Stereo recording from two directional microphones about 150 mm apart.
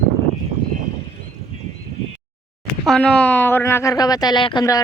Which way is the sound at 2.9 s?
5° left (ahead or behind).